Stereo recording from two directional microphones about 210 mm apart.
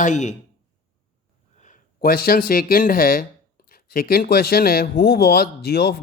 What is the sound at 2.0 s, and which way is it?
Speech, 45° left (ahead or behind).